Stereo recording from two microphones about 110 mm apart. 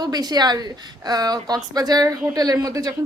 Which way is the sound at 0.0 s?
40° right (ahead or behind).